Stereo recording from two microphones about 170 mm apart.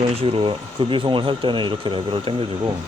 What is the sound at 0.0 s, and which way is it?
Speech, 35° right (ahead or behind).